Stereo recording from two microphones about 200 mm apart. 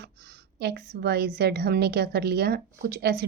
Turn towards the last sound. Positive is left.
turn(degrees=-50)  # may be behind; listen again after turning